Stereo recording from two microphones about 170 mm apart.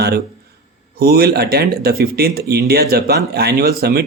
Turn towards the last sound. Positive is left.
turn(degrees=-65)  # may be behind; listen again after turning